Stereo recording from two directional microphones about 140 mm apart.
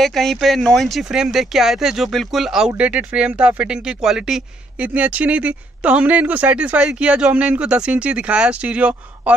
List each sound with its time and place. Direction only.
0.0 s speech: centre (ahead or behind)